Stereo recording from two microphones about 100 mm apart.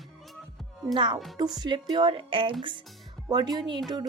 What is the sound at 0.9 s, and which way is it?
Speech, 50° right (ahead or behind).